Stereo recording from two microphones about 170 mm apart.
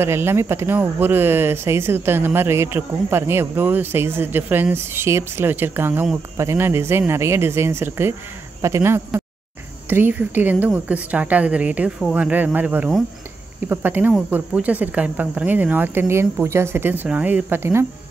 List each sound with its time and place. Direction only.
0.0 s speech: 15° right (ahead or behind)